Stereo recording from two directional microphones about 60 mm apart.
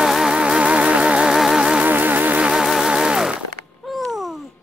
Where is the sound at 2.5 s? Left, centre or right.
Centre.